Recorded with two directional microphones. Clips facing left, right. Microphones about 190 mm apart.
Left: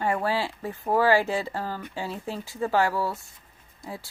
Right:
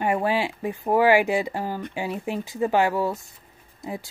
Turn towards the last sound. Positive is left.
turn(degrees=-20)  # may be behind; listen again after turning